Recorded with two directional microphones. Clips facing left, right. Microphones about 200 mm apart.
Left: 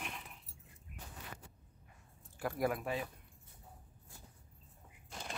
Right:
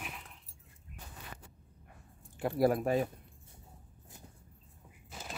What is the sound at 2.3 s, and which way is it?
Speech, 30° right (ahead or behind).